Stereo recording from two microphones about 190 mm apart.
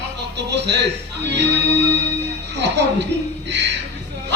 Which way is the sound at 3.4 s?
65° right (ahead or behind).